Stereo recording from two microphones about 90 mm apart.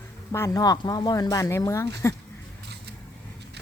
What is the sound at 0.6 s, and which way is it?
Speech, 45° left (ahead or behind).